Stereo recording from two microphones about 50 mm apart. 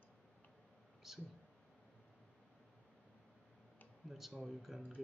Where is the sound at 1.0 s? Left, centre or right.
Centre.